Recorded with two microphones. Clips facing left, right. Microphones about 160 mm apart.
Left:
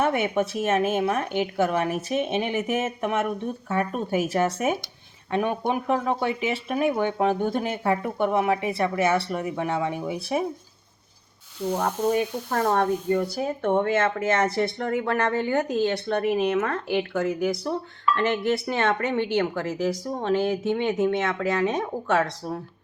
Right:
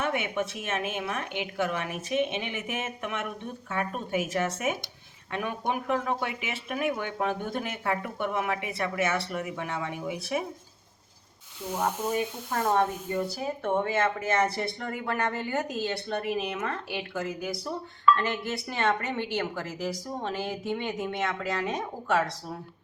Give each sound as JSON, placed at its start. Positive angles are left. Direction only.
{"t": 0.0, "sound": "speech", "side_deg": 40}
{"t": 11.8, "sound": "a woman's voice", "side_deg": 50}